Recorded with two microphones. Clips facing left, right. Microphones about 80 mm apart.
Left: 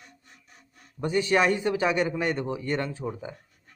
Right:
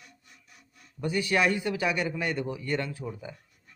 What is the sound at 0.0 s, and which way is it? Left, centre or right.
Speech, left.